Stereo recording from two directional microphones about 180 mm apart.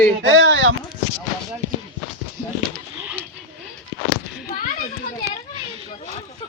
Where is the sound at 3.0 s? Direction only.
10° right (ahead or behind).